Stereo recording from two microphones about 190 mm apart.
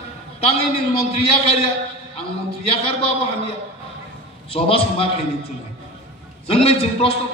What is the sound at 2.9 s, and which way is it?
A man's voice, 30° left (ahead or behind).